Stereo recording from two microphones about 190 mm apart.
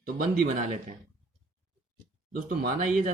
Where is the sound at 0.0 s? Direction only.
45° right (ahead or behind).